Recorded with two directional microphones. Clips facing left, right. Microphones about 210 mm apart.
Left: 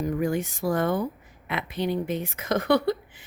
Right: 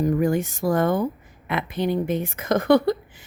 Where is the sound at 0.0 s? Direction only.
45° right (ahead or behind).